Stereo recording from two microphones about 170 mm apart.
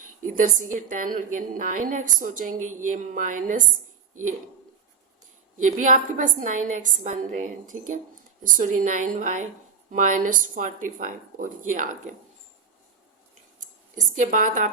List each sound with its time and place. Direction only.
0.0 s a woman's voice: 50° right (ahead or behind)
5.5 s a woman's voice: 50° right (ahead or behind)
13.6 s speech: 50° right (ahead or behind)